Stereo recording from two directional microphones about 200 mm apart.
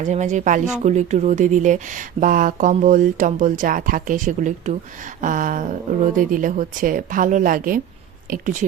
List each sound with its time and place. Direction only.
0.0 s a woman's voice: 35° right (ahead or behind)